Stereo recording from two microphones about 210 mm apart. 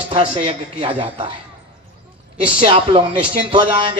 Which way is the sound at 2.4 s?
25° right (ahead or behind).